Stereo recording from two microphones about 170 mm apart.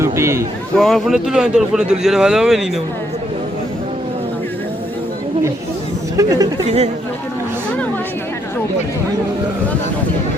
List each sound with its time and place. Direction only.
0.0 s a man's voice: 15° right (ahead or behind)
0.8 s a man's voice: centre (ahead or behind)
6.1 s speech: 20° right (ahead or behind)
6.7 s speech: 40° right (ahead or behind)